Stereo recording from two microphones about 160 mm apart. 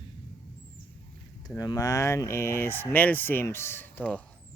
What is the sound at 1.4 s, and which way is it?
Speech, 25° left (ahead or behind).